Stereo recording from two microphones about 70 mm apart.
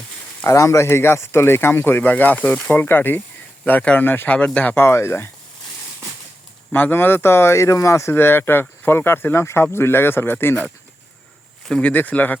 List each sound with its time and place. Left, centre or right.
0.4 s speech: left
4.3 s speech: centre
4.8 s speech: left
6.7 s speech: left
11.7 s speech: centre